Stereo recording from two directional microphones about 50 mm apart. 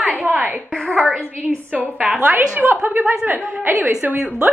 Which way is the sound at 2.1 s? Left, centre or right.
Right.